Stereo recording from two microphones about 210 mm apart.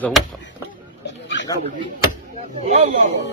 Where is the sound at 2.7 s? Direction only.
35° right (ahead or behind).